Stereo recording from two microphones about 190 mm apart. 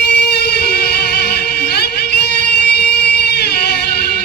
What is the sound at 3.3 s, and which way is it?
Music, 60° left (ahead or behind).